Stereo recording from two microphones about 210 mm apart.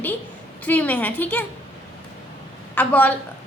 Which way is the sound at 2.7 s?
5° left (ahead or behind).